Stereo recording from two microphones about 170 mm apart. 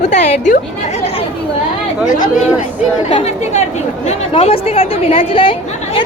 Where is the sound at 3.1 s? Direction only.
40° left (ahead or behind).